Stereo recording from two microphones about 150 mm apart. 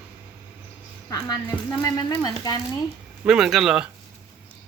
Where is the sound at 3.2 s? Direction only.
5° right (ahead or behind).